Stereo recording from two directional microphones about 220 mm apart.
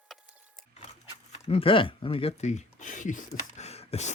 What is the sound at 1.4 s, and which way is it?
Speech, 25° left (ahead or behind).